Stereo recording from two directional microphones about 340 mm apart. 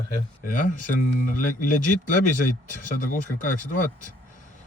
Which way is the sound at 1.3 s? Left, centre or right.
Left.